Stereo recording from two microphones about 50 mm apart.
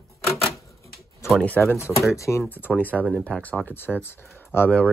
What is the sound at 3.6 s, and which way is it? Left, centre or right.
Speech, left.